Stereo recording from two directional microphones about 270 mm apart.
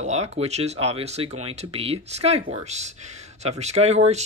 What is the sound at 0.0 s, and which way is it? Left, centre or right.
Speech, right.